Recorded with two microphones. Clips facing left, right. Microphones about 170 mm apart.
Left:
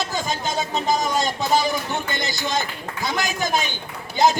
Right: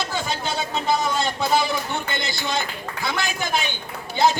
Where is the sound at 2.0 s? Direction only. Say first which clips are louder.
Left 1 dB; 45° left (ahead or behind).